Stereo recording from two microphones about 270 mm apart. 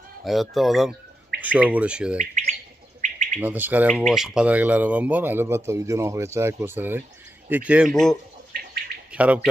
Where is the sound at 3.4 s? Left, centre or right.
Centre.